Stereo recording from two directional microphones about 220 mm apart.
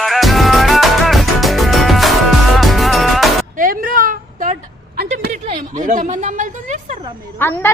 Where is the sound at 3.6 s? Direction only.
40° right (ahead or behind).